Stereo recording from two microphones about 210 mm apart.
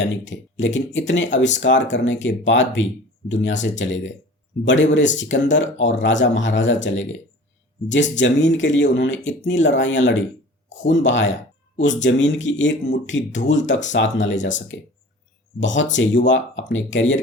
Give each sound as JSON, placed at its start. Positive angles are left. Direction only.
{"t": 0.0, "sound": "speech", "side_deg": 60}
{"t": 8.2, "sound": "speech", "side_deg": 60}